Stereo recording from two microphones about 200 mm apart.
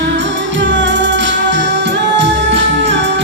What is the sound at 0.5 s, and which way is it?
Music, 65° right (ahead or behind).